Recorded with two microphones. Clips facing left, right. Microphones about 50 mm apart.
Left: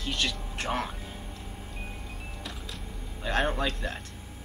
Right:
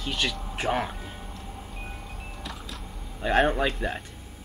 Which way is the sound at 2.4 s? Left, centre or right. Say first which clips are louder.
Right 3 dB; centre.